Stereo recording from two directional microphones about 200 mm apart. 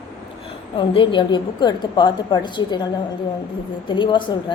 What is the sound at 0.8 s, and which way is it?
A woman's voice, 25° left (ahead or behind).